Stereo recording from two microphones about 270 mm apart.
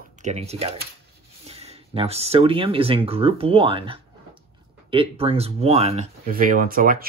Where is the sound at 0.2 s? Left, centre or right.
Right.